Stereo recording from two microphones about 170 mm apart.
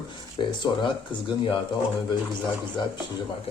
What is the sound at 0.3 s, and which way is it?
Speech, 25° left (ahead or behind).